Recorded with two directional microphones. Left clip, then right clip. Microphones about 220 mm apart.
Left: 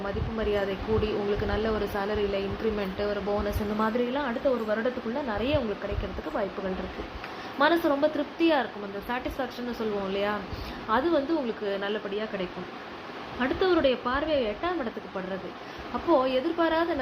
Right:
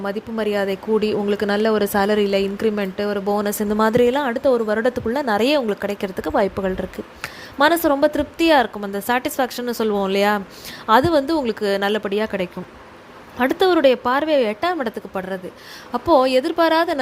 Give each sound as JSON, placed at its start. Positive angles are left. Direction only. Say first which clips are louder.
{"t": 0.0, "sound": "speech", "louder": "right 7 dB", "side_deg": -50}
{"t": 7.2, "sound": "a woman's voice", "louder": "right 8 dB", "side_deg": -45}